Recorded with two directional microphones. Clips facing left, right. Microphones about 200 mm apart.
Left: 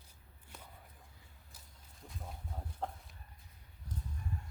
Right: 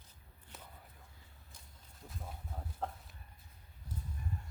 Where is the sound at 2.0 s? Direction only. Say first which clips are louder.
Even; centre (ahead or behind).